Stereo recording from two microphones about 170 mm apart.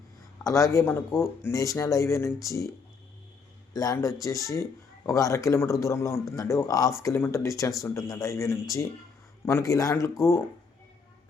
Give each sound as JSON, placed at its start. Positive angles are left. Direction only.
{"t": 0.4, "sound": "speech", "side_deg": 20}
{"t": 3.7, "sound": "speech", "side_deg": 20}